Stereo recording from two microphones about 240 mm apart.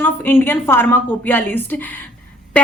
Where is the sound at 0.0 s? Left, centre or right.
Centre.